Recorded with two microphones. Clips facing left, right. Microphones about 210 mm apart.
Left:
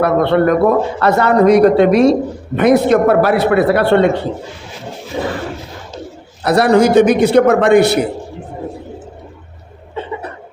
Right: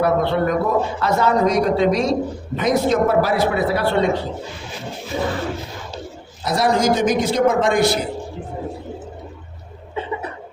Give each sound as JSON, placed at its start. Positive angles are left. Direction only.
{"t": 0.0, "sound": "a man's voice", "side_deg": 65}
{"t": 6.4, "sound": "a man's voice", "side_deg": 65}